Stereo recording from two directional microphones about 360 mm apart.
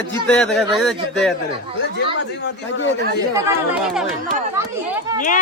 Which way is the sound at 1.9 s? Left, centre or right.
Left.